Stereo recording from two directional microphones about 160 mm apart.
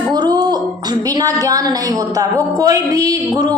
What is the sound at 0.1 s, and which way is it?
A woman's voice, 25° right (ahead or behind).